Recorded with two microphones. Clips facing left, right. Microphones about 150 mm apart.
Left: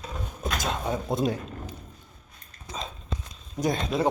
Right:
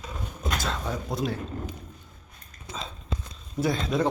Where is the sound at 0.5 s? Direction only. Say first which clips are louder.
Left 2 dB; 20° left (ahead or behind).